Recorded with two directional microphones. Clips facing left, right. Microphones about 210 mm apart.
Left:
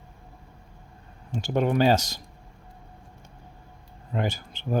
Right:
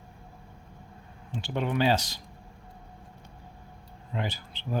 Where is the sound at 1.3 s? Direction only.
45° left (ahead or behind).